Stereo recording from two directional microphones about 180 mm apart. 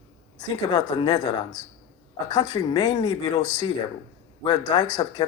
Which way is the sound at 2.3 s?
25° left (ahead or behind).